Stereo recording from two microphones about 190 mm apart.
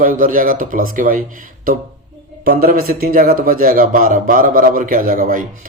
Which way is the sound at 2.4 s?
50° right (ahead or behind).